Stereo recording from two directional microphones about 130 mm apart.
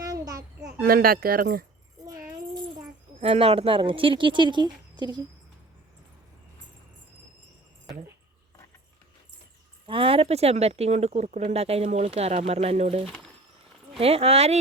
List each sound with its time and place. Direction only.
0.0 s a sound: 30° right (ahead or behind)
1.0 s speech: 90° right
3.2 s speech: 50° right (ahead or behind)
9.8 s speech: 45° right (ahead or behind)